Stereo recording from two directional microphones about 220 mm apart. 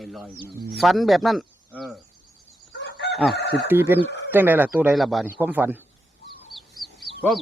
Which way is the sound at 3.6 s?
10° right (ahead or behind).